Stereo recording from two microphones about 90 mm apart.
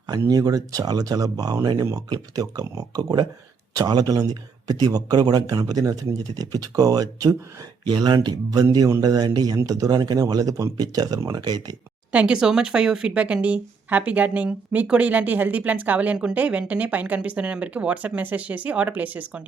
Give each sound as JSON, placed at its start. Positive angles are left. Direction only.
{"t": 0.1, "sound": "speech", "side_deg": -45}
{"t": 9.6, "sound": "speech", "side_deg": -40}
{"t": 12.1, "sound": "speech", "side_deg": -10}